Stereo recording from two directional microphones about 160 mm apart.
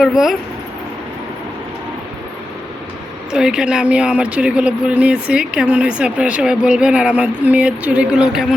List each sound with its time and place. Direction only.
0.0 s speech: centre (ahead or behind)
3.3 s speech: 5° right (ahead or behind)